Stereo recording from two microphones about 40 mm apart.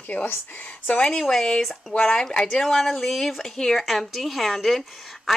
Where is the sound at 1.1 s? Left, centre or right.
Centre.